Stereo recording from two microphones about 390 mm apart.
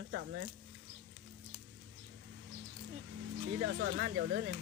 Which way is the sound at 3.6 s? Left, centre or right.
Right.